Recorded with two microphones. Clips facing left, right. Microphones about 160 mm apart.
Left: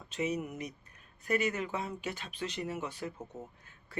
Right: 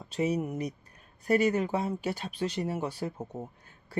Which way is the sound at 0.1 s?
35° right (ahead or behind).